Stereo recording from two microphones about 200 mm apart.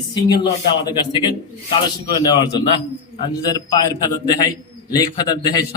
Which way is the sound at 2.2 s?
20° left (ahead or behind).